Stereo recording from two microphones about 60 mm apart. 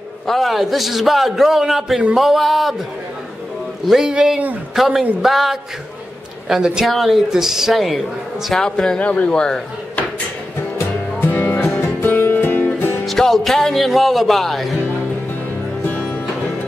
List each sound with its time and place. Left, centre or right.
0.3 s a man's voice: centre
3.8 s a man's voice: centre
8.6 s a man's voice: centre
11.1 s music: left
13.0 s speech: centre